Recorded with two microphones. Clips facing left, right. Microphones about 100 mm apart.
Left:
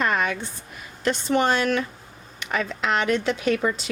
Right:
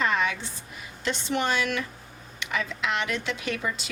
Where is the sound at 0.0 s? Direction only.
50° left (ahead or behind).